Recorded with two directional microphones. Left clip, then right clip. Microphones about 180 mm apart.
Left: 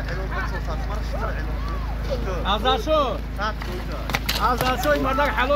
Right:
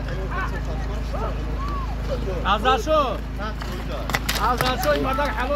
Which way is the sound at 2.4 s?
40° left (ahead or behind).